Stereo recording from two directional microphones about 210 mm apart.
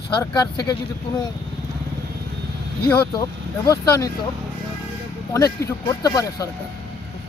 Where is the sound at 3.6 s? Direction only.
15° left (ahead or behind).